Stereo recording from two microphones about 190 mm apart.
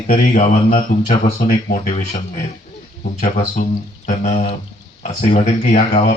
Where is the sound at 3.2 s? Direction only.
35° left (ahead or behind).